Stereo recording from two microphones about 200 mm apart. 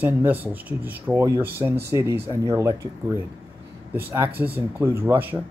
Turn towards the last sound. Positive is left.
turn(degrees=-10)  # may be behind; listen again after turning